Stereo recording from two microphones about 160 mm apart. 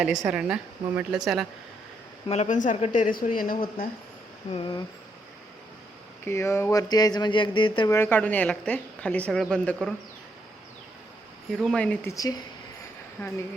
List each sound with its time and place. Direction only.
0.3 s a woman's voice: 5° right (ahead or behind)
2.2 s speech: 45° left (ahead or behind); by 3.6 s 60° left (ahead or behind)
4.5 s speech: 30° left (ahead or behind)
6.2 s speech: 15° left (ahead or behind)
7.9 s a woman's voice: 15° left (ahead or behind)
11.5 s a woman's voice: centre (ahead or behind)
12.1 s speech: 20° left (ahead or behind)